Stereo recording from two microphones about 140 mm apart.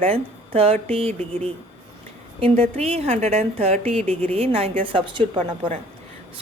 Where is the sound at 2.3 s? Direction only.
40° right (ahead or behind).